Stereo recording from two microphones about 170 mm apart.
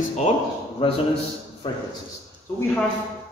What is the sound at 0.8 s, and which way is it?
Speech, 30° left (ahead or behind).